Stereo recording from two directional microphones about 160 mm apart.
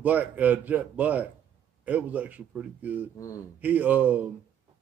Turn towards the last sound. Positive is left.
turn(degrees=-10)  # may be behind; listen again after turning